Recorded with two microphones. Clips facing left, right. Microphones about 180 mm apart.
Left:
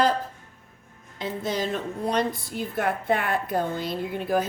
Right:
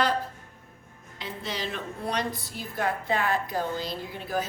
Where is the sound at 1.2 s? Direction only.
45° left (ahead or behind).